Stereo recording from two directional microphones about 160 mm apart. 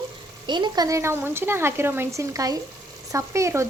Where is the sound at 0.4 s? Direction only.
30° right (ahead or behind).